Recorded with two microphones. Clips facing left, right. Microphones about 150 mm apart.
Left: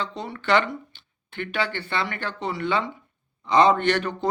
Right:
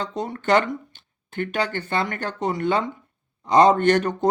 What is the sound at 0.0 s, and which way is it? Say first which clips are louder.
Speech: right 4 dB; 45° right (ahead or behind).